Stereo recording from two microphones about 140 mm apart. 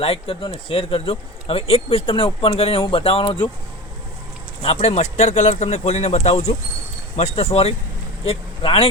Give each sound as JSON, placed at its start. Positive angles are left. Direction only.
{"t": 0.0, "sound": "speech", "side_deg": 45}
{"t": 4.6, "sound": "speech", "side_deg": 50}